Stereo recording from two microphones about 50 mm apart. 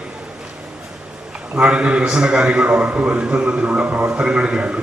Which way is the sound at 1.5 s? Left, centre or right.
Right.